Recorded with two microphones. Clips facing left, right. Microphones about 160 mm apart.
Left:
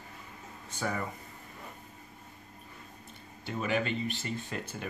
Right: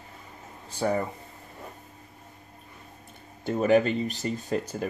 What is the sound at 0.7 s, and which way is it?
Speech, 35° right (ahead or behind).